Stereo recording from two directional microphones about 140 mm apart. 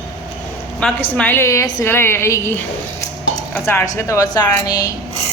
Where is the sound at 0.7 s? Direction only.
10° left (ahead or behind); by 4.9 s 25° left (ahead or behind).